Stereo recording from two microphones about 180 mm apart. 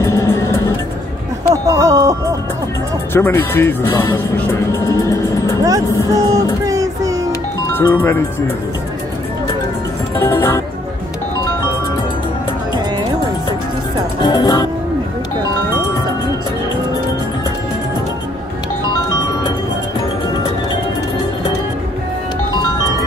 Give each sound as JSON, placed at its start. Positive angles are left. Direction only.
{"t": 0.0, "sound": "music", "side_deg": 15}
{"t": 1.5, "sound": "music", "side_deg": -20}
{"t": 3.1, "sound": "speech", "side_deg": 10}
{"t": 4.7, "sound": "music", "side_deg": 15}
{"t": 5.7, "sound": "music", "side_deg": -20}
{"t": 7.7, "sound": "speech", "side_deg": 15}
{"t": 10.1, "sound": "speech", "side_deg": 15}
{"t": 12.7, "sound": "music", "side_deg": -25}
{"t": 14.2, "sound": "music", "side_deg": 25}